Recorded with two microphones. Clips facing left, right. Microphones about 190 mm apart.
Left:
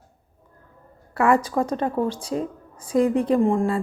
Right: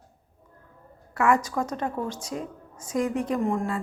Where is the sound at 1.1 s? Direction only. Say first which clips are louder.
Left 4 dB; 30° left (ahead or behind).